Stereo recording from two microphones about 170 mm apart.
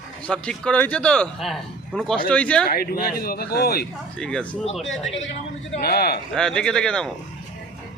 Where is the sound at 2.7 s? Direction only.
60° left (ahead or behind).